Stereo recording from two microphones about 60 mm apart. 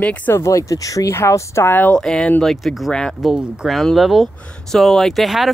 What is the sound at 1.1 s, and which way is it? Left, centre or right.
Speech, left.